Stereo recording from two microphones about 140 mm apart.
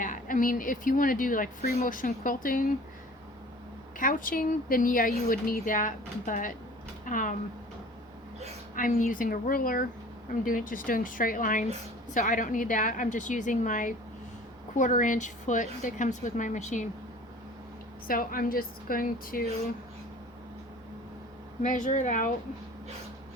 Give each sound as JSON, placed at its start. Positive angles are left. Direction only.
{"t": 0.0, "sound": "speech", "side_deg": 70}
{"t": 3.9, "sound": "speech", "side_deg": 75}
{"t": 8.7, "sound": "a woman's voice", "side_deg": 75}
{"t": 10.4, "sound": "a woman's voice", "side_deg": 75}
{"t": 18.1, "sound": "a woman's voice", "side_deg": 90}
{"t": 21.6, "sound": "a woman's voice", "side_deg": 60}